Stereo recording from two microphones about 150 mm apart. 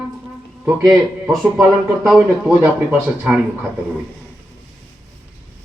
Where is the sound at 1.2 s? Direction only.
15° right (ahead or behind).